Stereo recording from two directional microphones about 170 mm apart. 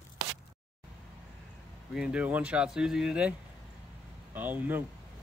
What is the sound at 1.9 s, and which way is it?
Speech, 5° right (ahead or behind).